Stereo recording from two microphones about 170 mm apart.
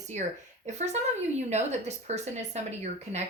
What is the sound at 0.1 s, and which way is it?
A woman's voice, 45° right (ahead or behind).